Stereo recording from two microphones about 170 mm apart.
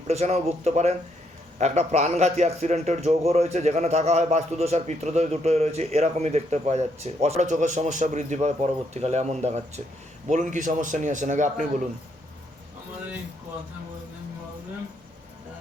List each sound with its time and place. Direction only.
0.1 s a man's voice: 40° right (ahead or behind)